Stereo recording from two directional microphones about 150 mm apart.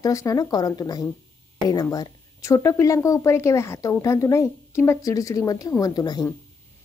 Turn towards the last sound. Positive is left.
turn(degrees=25)  # may be behind; listen again after turning